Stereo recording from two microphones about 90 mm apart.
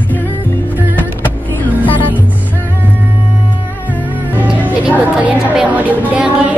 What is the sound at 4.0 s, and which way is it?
Music, 20° right (ahead or behind).